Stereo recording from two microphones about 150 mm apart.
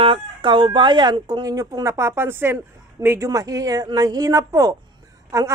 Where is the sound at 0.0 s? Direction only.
35° right (ahead or behind).